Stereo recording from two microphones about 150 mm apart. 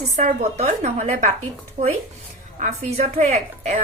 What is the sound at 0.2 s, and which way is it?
A woman's voice, 50° right (ahead or behind).